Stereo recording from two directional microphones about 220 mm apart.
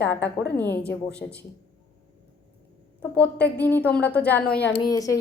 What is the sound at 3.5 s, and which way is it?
A woman's voice, 10° left (ahead or behind).